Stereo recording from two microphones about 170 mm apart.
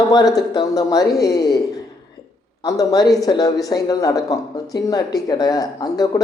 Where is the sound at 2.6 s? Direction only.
20° left (ahead or behind).